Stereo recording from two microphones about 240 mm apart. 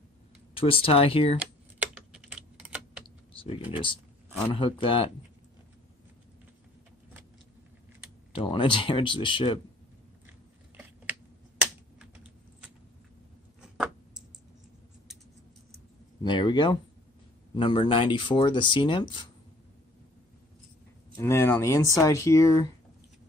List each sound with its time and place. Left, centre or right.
0.6 s speech: left
1.4 s typing: centre
3.7 s speech: left
8.3 s speech: left
13.6 s a sound: centre
16.2 s speech: centre
21.2 s speech: centre